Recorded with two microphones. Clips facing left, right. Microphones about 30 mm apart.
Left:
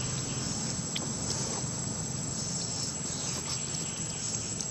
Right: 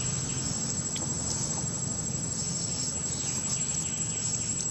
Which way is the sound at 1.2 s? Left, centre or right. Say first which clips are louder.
Even; centre.